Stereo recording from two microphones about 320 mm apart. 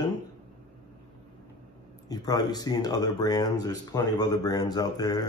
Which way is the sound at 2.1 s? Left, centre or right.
Centre.